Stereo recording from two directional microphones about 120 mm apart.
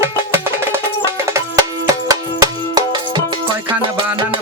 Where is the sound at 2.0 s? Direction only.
30° right (ahead or behind).